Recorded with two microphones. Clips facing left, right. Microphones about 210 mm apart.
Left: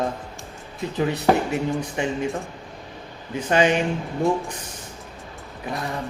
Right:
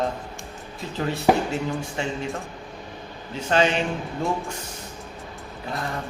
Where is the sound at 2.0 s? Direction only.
15° left (ahead or behind).